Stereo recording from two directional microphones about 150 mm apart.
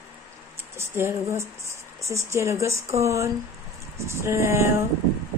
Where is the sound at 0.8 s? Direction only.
15° right (ahead or behind).